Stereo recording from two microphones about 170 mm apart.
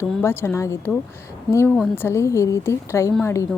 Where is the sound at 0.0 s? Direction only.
15° left (ahead or behind).